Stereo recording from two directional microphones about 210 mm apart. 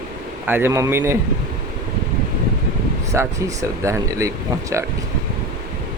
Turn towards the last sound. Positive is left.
turn(degrees=-15)  # may be behind; listen again after turning